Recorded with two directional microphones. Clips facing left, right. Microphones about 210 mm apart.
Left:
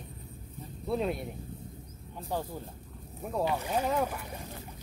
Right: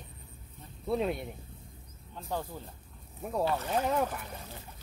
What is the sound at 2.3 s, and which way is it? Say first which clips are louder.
Speech: left 2 dB; 10° left (ahead or behind).